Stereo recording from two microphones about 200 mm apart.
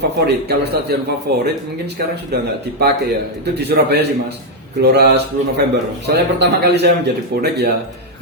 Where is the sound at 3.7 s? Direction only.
55° right (ahead or behind).